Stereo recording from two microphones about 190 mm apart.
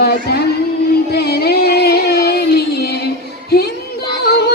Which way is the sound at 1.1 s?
55° left (ahead or behind).